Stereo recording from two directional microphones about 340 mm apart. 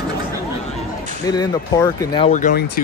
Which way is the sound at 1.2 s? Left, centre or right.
Centre.